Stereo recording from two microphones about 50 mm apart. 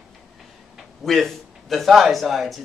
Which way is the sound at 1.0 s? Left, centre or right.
Centre.